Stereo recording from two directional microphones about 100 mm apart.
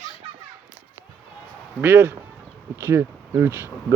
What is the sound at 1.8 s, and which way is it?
Speech, 20° right (ahead or behind).